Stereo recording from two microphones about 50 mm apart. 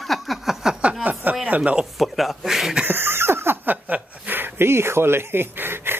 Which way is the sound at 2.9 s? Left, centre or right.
Right.